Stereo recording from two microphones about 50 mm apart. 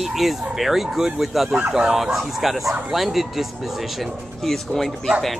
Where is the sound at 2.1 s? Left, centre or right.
Centre.